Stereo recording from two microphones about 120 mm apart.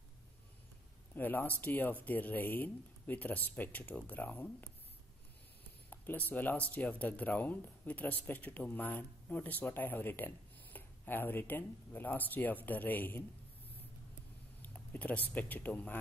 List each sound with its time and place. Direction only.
1.1 s speech: 15° left (ahead or behind)
5.9 s speech: 15° left (ahead or behind)
14.6 s speech: 15° left (ahead or behind)